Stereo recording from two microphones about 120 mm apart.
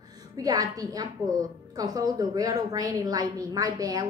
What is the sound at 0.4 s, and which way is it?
A woman's voice, 30° right (ahead or behind).